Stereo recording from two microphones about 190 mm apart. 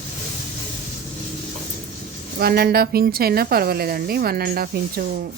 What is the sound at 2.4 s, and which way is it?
Speech, 55° right (ahead or behind).